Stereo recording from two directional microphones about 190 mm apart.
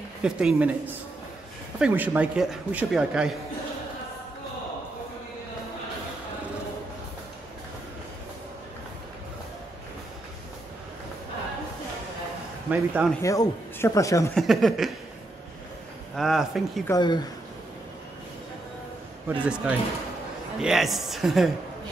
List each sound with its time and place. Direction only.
0.2 s a man's voice: 5° right (ahead or behind)
12.6 s speech: 10° right (ahead or behind)
13.2 s speech: 15° left (ahead or behind)
14.3 s a man's voice: centre (ahead or behind)
16.2 s a man's voice: centre (ahead or behind)
16.8 s speech: 20° left (ahead or behind)
19.4 s a man's voice: 5° right (ahead or behind)